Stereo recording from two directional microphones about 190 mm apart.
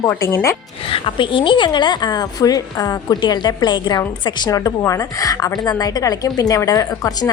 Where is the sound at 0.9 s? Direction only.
25° left (ahead or behind).